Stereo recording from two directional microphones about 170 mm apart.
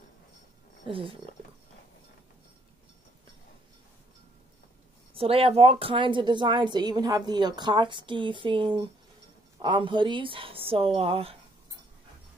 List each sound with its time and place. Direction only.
0.8 s a woman's voice: 30° right (ahead or behind)
5.1 s a woman's voice: 35° right (ahead or behind)